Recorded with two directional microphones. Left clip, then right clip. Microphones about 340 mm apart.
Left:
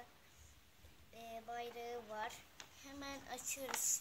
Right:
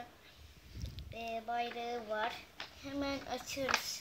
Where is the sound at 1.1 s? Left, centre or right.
Left.